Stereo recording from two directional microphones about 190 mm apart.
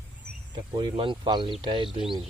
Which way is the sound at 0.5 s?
25° right (ahead or behind).